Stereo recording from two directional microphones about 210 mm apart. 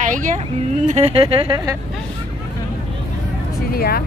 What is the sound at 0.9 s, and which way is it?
Speech, 30° right (ahead or behind).